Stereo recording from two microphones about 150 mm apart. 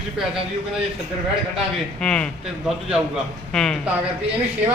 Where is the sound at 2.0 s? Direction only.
5° left (ahead or behind).